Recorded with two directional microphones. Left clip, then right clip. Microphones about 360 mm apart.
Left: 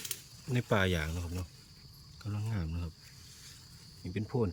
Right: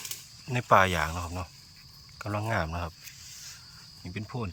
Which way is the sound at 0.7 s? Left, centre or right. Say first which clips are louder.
Right 10 dB; centre.